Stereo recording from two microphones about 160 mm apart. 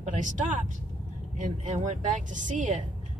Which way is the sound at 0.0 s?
50° right (ahead or behind).